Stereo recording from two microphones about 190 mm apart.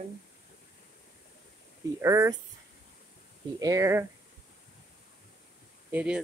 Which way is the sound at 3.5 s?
15° right (ahead or behind).